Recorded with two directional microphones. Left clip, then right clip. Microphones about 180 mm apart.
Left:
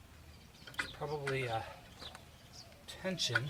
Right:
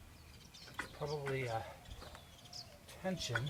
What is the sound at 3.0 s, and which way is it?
Speech, 20° left (ahead or behind).